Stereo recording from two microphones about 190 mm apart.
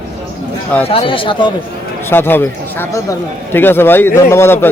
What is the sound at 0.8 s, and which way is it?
Speech, 30° left (ahead or behind).